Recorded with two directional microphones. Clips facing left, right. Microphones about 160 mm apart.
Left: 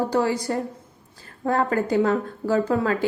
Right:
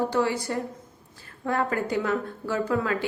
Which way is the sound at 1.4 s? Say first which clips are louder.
Left 4 dB; 40° left (ahead or behind).